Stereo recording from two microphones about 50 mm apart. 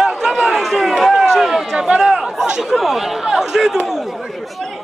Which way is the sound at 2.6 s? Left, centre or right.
Centre.